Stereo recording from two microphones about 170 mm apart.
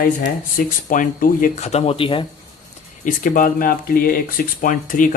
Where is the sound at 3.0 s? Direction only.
55° left (ahead or behind).